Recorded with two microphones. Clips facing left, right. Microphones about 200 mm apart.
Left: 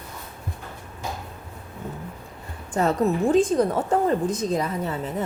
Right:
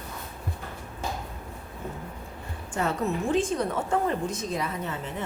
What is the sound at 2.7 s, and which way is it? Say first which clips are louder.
A woman's voice: left 6 dB; 40° left (ahead or behind).